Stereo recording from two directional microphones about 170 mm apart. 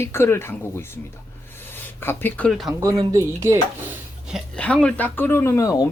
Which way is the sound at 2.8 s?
20° right (ahead or behind).